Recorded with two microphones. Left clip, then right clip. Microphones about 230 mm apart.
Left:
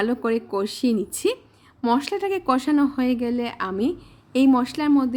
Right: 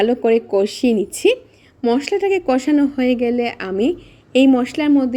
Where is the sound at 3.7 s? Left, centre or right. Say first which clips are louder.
Right 7 dB; left.